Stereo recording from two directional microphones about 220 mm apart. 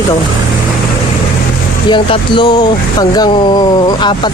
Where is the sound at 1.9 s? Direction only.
20° left (ahead or behind).